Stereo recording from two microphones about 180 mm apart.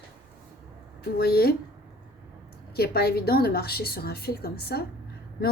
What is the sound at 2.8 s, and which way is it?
A woman's voice, 60° left (ahead or behind).